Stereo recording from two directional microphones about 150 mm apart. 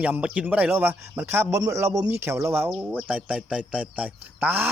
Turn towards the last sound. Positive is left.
turn(degrees=-10)  # may be behind; listen again after turning